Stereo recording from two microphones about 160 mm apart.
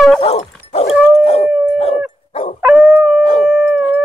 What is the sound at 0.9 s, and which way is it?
Howl, 5° right (ahead or behind).